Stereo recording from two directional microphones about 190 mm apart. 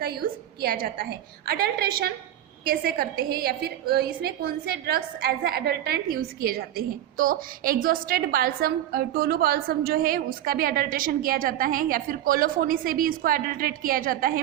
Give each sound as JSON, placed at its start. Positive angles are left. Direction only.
{"t": 0.0, "sound": "a woman's voice", "side_deg": -55}